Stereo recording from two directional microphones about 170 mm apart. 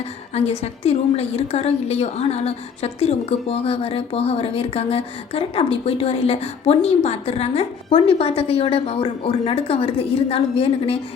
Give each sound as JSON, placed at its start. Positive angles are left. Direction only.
{"t": 0.3, "sound": "a woman's voice", "side_deg": 40}